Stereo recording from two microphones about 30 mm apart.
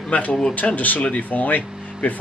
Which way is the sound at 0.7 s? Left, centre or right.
Left.